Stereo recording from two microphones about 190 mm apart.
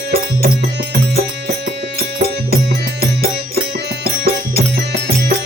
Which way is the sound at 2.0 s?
55° right (ahead or behind).